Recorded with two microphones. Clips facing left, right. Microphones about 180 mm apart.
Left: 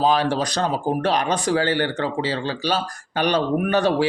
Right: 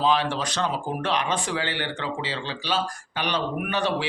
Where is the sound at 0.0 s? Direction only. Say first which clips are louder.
Left 4 dB; 40° left (ahead or behind).